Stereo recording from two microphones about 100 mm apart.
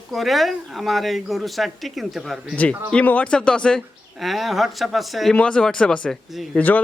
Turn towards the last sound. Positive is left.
turn(degrees=15)  # may be behind; listen again after turning